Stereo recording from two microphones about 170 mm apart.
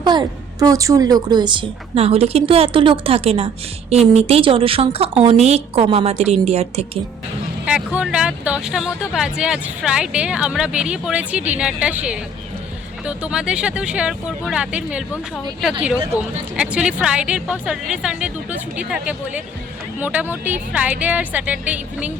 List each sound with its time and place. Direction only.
0.0 s speech: 25° right (ahead or behind)
7.9 s speech: 5° right (ahead or behind)